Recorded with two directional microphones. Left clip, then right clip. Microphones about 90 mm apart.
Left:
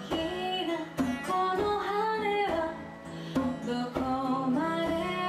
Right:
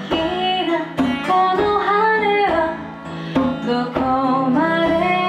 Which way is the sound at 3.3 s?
15° left (ahead or behind).